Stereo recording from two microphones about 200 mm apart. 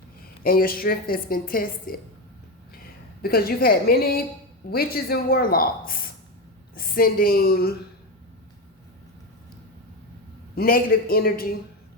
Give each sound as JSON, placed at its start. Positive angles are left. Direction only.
{"t": 0.4, "sound": "a woman's voice", "side_deg": 45}
{"t": 3.2, "sound": "a woman's voice", "side_deg": 50}
{"t": 10.5, "sound": "a woman's voice", "side_deg": 50}